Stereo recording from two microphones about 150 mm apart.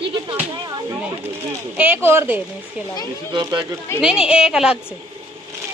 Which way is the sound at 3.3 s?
30° right (ahead or behind).